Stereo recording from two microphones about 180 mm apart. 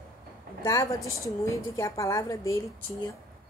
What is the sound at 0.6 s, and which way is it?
A woman's voice, 20° left (ahead or behind).